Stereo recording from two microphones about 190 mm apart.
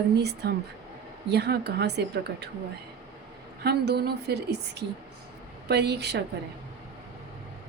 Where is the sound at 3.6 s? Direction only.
60° right (ahead or behind).